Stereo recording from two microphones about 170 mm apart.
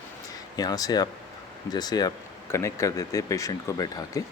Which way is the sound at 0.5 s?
25° left (ahead or behind).